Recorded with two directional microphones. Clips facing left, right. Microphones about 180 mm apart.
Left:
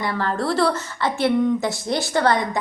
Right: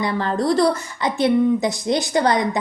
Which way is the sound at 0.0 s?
20° right (ahead or behind).